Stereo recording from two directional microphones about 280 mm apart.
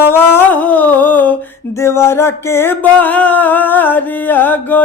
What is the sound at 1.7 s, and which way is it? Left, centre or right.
Music, centre.